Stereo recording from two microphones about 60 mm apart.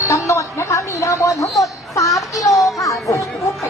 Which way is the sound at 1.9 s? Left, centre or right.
Left.